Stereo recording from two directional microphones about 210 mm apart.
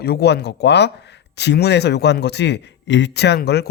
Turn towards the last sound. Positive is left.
turn(degrees=50)  # may be behind; listen again after turning